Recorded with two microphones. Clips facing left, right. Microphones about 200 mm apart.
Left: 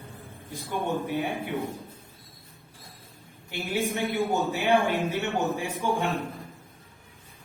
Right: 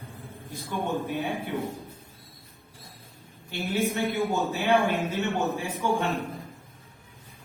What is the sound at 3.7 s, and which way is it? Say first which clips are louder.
A man's voice: right 1 dB; 15° left (ahead or behind).